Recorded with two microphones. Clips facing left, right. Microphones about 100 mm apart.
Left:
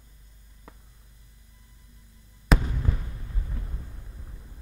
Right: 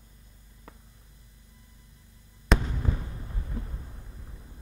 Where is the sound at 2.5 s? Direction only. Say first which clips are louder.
Left 1 dB; 5° left (ahead or behind).